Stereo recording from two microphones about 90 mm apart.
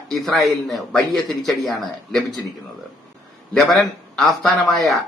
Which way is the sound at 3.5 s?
10° left (ahead or behind).